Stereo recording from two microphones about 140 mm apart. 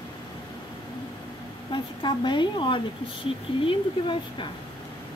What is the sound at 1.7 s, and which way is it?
Speech, 35° left (ahead or behind).